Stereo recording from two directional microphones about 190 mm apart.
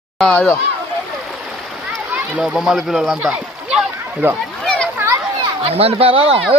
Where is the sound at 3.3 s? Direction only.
5° right (ahead or behind).